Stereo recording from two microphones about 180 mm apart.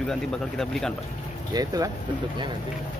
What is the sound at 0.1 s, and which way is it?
Speech, 5° left (ahead or behind).